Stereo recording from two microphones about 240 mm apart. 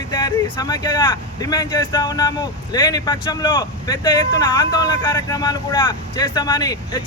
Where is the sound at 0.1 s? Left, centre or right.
Centre.